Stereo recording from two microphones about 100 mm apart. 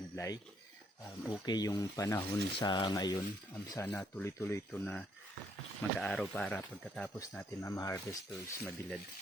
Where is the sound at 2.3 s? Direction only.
50° left (ahead or behind).